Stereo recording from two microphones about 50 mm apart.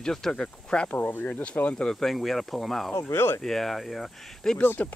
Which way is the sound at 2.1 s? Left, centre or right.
Centre.